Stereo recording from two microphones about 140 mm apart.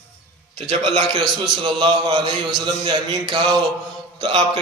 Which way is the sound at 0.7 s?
40° right (ahead or behind).